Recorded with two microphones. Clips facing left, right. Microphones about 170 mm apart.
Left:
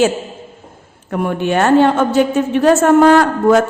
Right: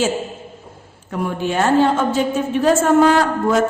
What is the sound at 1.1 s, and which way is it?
A woman's voice, 60° left (ahead or behind).